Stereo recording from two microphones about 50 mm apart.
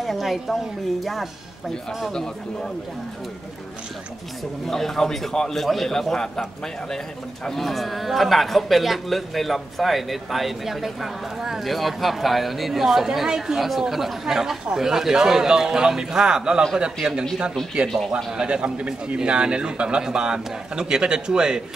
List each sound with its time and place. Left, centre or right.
0.0 s a man's voice: centre
4.6 s a man's voice: centre
7.4 s a man's voice: centre
17.8 s a man's voice: centre
18.1 s a man's voice: centre